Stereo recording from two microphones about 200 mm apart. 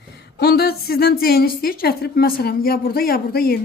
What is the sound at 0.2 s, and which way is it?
A woman's voice, 55° left (ahead or behind).